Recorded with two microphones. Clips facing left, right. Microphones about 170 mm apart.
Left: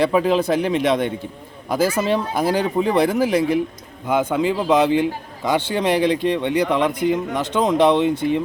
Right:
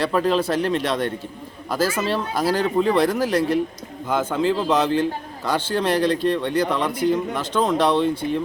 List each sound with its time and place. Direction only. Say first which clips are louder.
0.0 s speech: left 3 dB; 10° left (ahead or behind)